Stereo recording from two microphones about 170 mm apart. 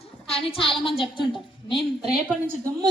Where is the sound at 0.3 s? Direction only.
35° left (ahead or behind).